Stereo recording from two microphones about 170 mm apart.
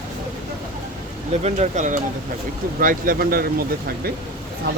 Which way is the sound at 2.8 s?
55° right (ahead or behind).